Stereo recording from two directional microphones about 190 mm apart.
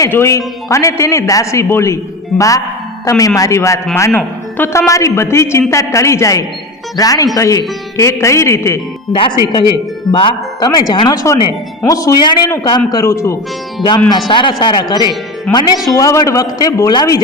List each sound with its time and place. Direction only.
0.0 s a man's voice: 15° left (ahead or behind)
3.1 s a man's voice: 20° left (ahead or behind)